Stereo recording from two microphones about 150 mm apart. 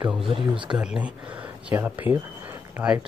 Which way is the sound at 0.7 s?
5° right (ahead or behind).